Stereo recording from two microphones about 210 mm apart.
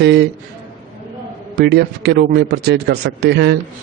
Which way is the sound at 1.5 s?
50° right (ahead or behind).